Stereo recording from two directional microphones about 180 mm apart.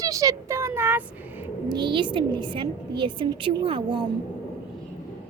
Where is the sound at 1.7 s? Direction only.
25° right (ahead or behind).